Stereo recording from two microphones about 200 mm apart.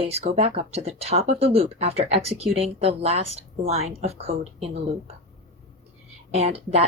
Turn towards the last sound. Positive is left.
turn(degrees=-30)  # may be behind; listen again after turning